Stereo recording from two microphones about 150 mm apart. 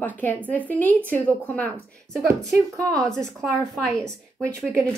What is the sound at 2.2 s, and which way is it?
Speech, 20° right (ahead or behind).